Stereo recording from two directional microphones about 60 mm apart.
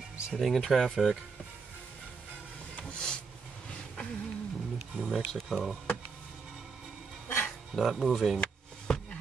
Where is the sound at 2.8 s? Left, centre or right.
Left.